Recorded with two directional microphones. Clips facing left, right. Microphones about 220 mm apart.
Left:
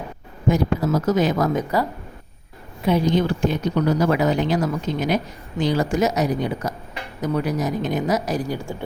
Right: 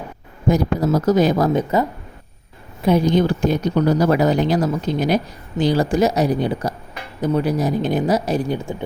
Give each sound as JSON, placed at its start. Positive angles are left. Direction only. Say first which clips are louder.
{"t": 0.4, "sound": "speech", "louder": "right 2 dB", "side_deg": -40}
{"t": 2.8, "sound": "speech", "louder": "right 3 dB", "side_deg": -45}